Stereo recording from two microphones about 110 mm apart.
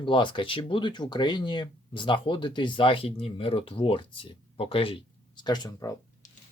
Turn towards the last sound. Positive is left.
turn(degrees=40)  # may be behind; listen again after turning